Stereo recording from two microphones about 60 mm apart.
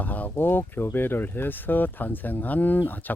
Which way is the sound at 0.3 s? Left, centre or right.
Left.